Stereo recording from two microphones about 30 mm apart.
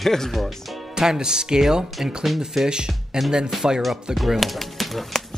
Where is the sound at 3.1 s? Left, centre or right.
Right.